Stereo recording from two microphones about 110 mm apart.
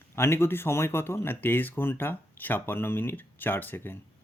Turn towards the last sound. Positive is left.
turn(degrees=20)  # may be behind; listen again after turning